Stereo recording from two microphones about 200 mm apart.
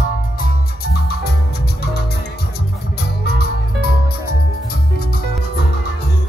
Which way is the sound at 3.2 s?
50° left (ahead or behind).